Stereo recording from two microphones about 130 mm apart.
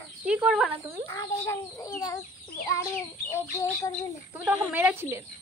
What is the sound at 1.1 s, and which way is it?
Speech, 20° left (ahead or behind).